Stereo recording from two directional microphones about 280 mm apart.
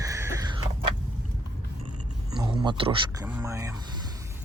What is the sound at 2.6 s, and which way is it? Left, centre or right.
Speech, centre.